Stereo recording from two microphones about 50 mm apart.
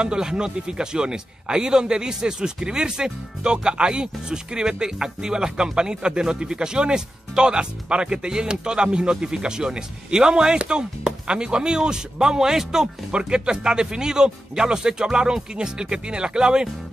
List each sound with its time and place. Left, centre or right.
0.0 s a man's voice: centre